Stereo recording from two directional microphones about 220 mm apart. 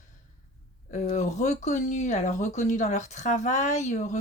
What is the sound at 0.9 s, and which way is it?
Speech, 35° left (ahead or behind).